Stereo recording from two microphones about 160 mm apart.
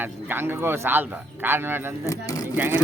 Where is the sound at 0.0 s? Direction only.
15° right (ahead or behind).